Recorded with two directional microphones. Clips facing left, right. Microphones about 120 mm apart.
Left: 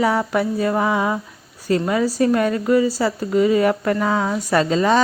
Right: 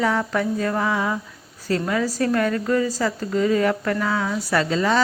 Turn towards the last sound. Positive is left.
turn(degrees=20)  # may be behind; listen again after turning